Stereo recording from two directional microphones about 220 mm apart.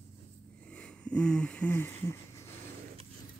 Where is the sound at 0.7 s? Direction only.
5° left (ahead or behind).